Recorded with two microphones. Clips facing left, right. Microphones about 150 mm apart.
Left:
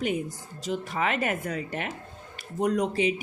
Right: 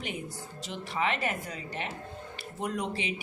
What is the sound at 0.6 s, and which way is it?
A woman's voice, 45° left (ahead or behind).